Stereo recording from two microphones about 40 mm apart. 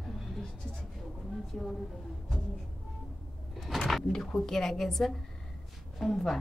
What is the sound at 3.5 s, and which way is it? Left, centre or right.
Vehicle, centre.